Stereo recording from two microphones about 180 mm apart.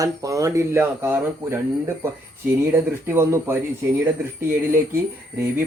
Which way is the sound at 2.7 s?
10° right (ahead or behind).